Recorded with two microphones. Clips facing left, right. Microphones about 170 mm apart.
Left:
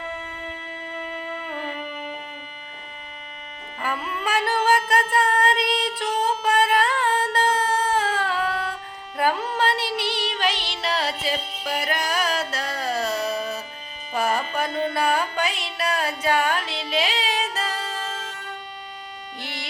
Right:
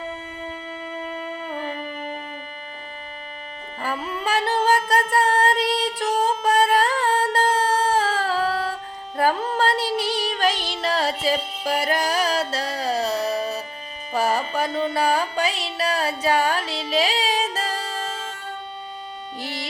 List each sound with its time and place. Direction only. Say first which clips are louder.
3.8 s music: right 1 dB; 35° right (ahead or behind)
7.9 s a sound: right 2 dB; 35° right (ahead or behind)
9.1 s music: right 2 dB; 35° right (ahead or behind)
19.4 s owl: right 5 dB; 40° right (ahead or behind)